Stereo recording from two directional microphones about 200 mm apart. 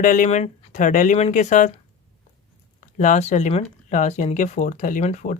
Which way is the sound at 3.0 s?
35° left (ahead or behind).